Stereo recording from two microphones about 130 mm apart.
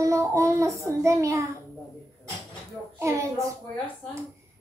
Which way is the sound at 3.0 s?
25° right (ahead or behind).